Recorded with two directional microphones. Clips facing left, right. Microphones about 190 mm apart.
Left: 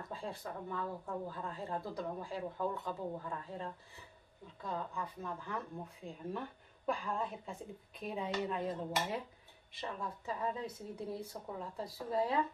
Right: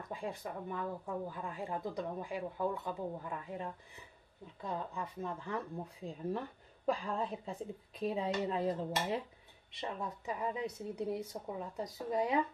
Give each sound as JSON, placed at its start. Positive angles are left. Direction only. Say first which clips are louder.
{"t": 0.1, "sound": "speech", "louder": "right 3 dB", "side_deg": -15}
{"t": 6.9, "sound": "speech", "louder": "right 2 dB", "side_deg": -35}